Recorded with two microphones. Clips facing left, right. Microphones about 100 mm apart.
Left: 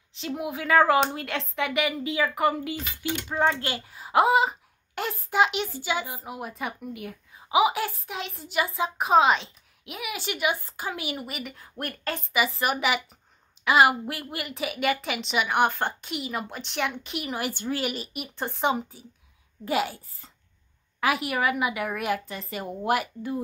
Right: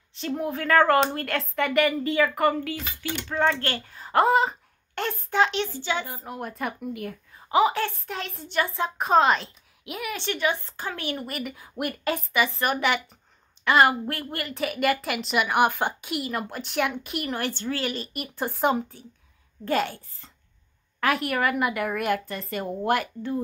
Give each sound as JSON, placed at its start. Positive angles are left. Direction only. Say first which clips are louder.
{"t": 0.1, "sound": "a woman's voice", "louder": "right 3 dB", "side_deg": 5}
{"t": 12.3, "sound": "a woman's voice", "louder": "left 1 dB", "side_deg": 5}